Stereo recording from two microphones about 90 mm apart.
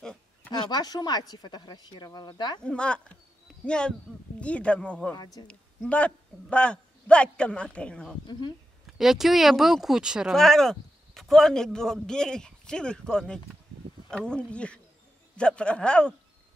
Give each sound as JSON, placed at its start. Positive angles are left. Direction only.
{"t": 0.5, "sound": "speech", "side_deg": 50}
{"t": 2.6, "sound": "a man's voice", "side_deg": 10}
{"t": 5.1, "sound": "speech", "side_deg": 50}
{"t": 5.5, "sound": "a man's voice", "side_deg": 15}
{"t": 8.3, "sound": "speech", "side_deg": 55}
{"t": 8.8, "sound": "speech", "side_deg": -5}
{"t": 10.3, "sound": "a man's voice", "side_deg": 5}